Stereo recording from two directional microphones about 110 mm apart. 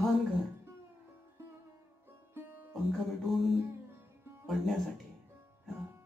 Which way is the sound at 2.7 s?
Centre (ahead or behind).